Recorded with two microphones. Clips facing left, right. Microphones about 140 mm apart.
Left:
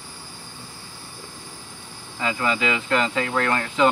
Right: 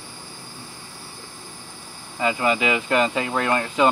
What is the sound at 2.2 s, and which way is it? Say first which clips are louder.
Speech: right 3 dB; 15° right (ahead or behind).